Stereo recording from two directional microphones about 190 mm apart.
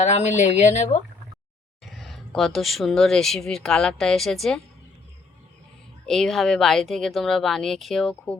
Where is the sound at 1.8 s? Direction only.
Centre (ahead or behind).